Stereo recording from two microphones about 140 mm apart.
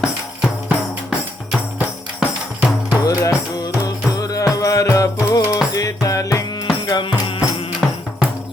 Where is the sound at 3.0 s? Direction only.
25° left (ahead or behind).